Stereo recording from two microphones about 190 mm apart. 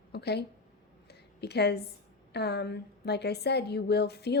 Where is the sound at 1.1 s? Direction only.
60° left (ahead or behind).